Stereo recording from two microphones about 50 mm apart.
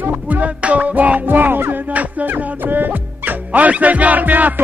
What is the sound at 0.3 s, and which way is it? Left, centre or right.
Music, right.